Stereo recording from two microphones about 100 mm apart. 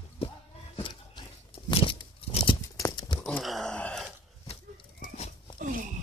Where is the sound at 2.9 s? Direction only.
45° left (ahead or behind).